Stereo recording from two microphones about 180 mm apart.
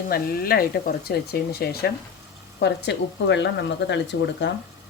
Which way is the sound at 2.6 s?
75° left (ahead or behind).